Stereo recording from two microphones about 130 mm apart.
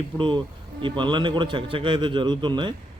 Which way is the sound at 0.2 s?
40° right (ahead or behind).